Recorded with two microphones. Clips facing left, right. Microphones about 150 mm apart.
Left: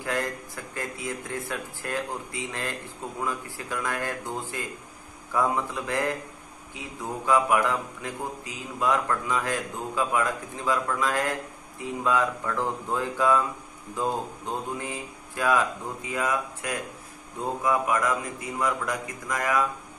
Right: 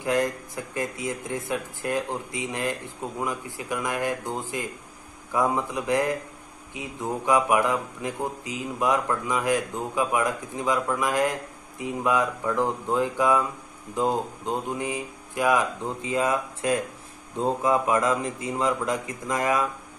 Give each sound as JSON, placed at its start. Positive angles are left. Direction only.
{"t": 0.0, "sound": "a man's voice", "side_deg": -20}